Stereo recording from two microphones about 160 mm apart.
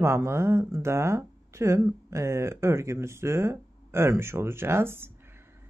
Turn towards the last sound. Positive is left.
turn(degrees=-15)  # may be behind; listen again after turning